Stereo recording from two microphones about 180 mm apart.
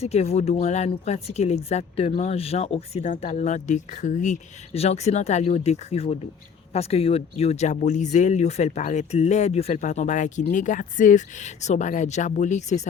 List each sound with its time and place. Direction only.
0.0 s speech: 35° left (ahead or behind)